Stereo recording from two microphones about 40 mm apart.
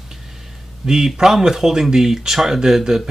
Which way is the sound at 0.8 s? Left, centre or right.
Centre.